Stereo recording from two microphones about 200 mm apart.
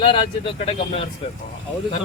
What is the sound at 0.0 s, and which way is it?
Speech, 25° left (ahead or behind).